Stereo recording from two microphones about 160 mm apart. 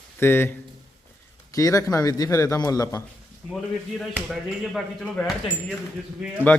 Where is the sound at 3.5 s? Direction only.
Centre (ahead or behind).